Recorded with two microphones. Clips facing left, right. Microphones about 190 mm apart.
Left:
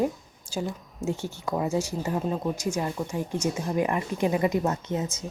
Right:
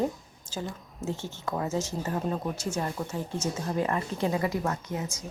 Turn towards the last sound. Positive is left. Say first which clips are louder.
# left 4 dB
turn(degrees=25)  # may be behind; listen again after turning